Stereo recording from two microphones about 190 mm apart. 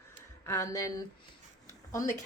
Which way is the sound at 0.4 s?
15° left (ahead or behind).